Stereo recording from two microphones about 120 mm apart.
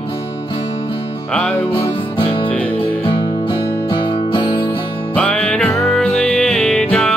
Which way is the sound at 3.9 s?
40° left (ahead or behind).